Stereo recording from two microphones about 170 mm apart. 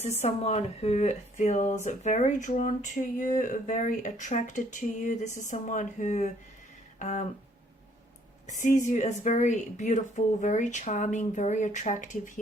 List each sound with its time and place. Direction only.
0.0 s speech: 40° left (ahead or behind)
8.4 s speech: 45° left (ahead or behind)